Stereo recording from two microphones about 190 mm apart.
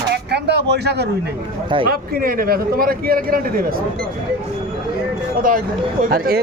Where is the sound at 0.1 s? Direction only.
60° right (ahead or behind).